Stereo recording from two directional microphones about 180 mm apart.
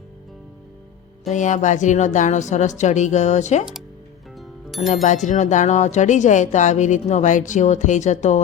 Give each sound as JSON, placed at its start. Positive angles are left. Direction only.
{"t": 1.3, "sound": "speech", "side_deg": 40}
{"t": 4.4, "sound": "music", "side_deg": 0}
{"t": 5.0, "sound": "speech", "side_deg": 45}